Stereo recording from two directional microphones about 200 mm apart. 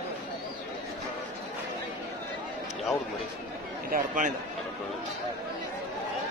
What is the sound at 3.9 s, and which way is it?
Speech, 40° right (ahead or behind).